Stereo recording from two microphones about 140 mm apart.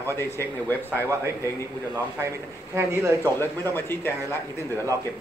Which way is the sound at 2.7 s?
20° right (ahead or behind).